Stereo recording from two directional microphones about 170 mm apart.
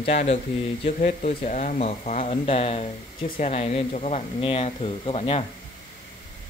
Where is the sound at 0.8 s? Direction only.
45° left (ahead or behind).